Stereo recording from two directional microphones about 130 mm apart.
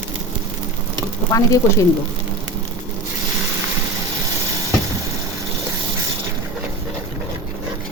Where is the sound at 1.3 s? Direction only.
25° left (ahead or behind).